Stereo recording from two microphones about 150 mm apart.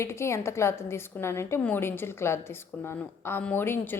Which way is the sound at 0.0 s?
20° left (ahead or behind).